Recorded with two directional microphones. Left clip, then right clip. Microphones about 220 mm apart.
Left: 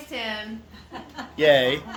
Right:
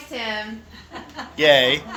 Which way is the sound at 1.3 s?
25° left (ahead or behind).